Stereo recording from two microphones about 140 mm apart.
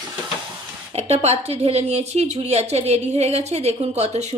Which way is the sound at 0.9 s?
45° right (ahead or behind).